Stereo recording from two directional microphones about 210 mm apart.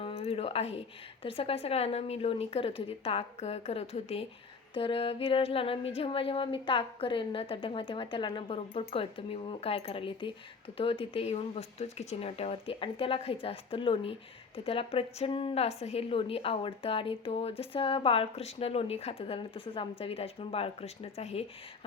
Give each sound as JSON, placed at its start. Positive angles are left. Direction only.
{"t": 0.0, "sound": "speech", "side_deg": 30}